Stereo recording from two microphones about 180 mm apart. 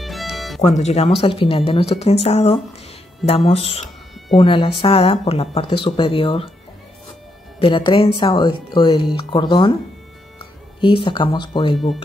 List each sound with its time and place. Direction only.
0.0 s music: centre (ahead or behind)
0.6 s speech: 40° left (ahead or behind)
7.5 s speech: 30° left (ahead or behind)
10.8 s speech: 30° left (ahead or behind)